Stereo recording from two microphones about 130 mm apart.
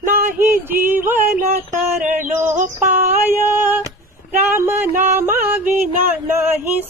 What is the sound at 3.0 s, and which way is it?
Female singing, 15° right (ahead or behind).